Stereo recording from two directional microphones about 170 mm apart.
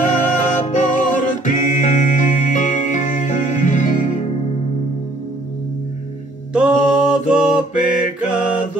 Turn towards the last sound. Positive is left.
turn(degrees=-5)  # may be behind; listen again after turning